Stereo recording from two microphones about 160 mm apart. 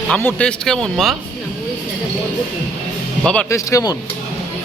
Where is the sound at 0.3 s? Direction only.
5° left (ahead or behind).